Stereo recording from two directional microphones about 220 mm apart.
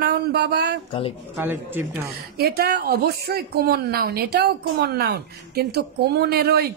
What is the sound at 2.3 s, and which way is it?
A woman's voice, 45° right (ahead or behind).